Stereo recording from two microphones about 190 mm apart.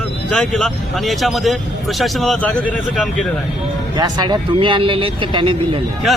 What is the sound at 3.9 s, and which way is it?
Speech, 20° right (ahead or behind).